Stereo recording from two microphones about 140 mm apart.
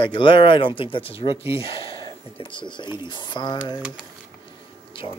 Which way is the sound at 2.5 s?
35° left (ahead or behind).